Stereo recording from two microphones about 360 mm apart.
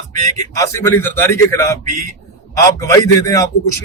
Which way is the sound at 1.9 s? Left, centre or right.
Centre.